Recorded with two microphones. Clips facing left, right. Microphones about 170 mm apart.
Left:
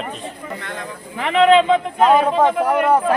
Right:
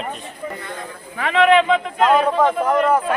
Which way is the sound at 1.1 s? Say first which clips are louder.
Left 2 dB; 25° left (ahead or behind).